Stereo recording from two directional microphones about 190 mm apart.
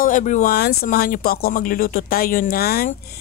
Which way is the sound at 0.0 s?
40° left (ahead or behind).